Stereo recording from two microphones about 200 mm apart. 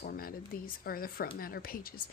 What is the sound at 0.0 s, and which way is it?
Speech, 50° left (ahead or behind).